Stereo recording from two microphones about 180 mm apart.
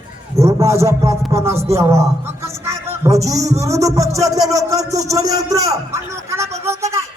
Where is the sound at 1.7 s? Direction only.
15° right (ahead or behind).